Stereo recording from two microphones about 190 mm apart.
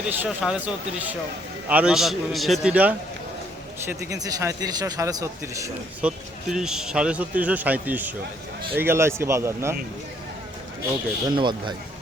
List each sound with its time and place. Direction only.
0.1 s a man's voice: 5° right (ahead or behind)
6.1 s speech: 5° right (ahead or behind)
11.3 s speech: 25° right (ahead or behind)